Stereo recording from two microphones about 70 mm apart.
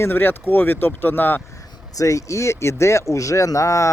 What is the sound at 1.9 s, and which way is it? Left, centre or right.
Speech, left.